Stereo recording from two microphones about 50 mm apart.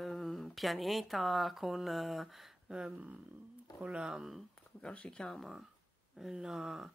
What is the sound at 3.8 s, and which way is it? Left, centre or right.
Speech, right.